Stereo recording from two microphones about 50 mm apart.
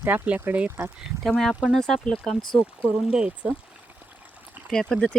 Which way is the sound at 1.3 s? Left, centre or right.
Centre.